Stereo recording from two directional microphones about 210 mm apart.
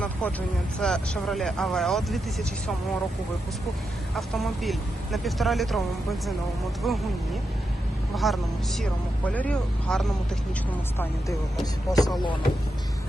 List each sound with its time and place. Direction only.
0.0 s vehicle: 5° left (ahead or behind)
0.8 s speech: 5° left (ahead or behind)
4.1 s speech: centre (ahead or behind)
8.1 s speech: centre (ahead or behind)
11.6 s speech: 20° left (ahead or behind)